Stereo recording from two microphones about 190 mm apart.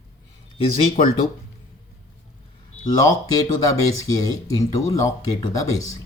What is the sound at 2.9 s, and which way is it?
Speech, 20° left (ahead or behind).